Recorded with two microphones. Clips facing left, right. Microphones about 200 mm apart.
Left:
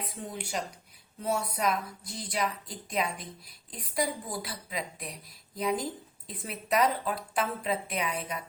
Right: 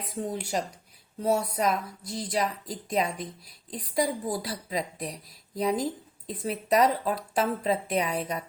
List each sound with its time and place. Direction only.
0.2 s a woman's voice: 40° right (ahead or behind)